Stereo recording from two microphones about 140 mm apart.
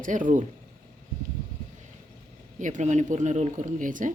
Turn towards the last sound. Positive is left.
turn(degrees=-70)  # may be behind; listen again after turning